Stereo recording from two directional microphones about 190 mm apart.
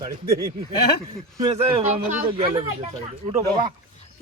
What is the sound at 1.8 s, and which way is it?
Speech, 35° right (ahead or behind).